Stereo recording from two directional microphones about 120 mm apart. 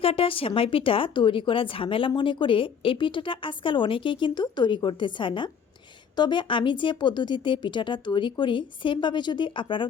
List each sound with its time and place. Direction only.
0.0 s speech: 50° left (ahead or behind)